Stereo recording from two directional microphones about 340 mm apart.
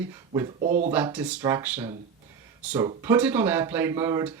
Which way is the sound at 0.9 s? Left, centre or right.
Centre.